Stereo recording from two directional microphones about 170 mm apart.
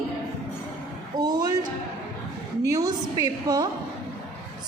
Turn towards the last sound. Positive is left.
turn(degrees=-20)  # may be behind; listen again after turning